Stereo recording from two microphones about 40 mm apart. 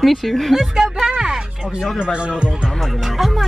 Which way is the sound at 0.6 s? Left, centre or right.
Centre.